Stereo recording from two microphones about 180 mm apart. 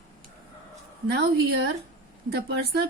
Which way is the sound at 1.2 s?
60° right (ahead or behind).